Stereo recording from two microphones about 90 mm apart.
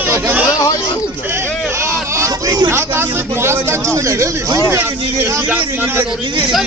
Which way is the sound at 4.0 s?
35° right (ahead or behind).